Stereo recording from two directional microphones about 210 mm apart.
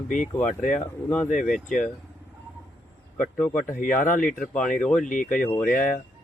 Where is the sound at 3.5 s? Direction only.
40° left (ahead or behind).